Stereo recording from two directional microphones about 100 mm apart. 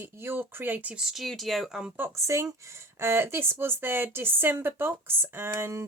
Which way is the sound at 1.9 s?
25° right (ahead or behind).